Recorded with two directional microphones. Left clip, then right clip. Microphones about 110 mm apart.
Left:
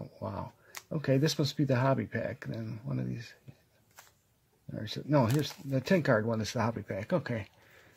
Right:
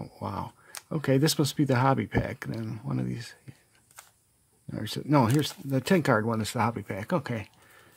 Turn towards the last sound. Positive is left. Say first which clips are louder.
# right 2 dB
turn(degrees=-25)  # may be behind; listen again after turning